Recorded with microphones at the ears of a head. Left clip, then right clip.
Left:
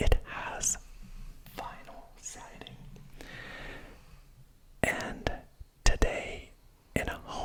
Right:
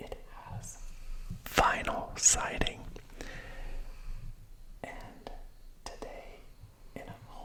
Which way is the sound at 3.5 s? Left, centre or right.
Left.